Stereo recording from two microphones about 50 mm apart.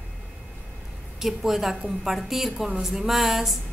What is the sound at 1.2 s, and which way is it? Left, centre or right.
A woman's voice, centre.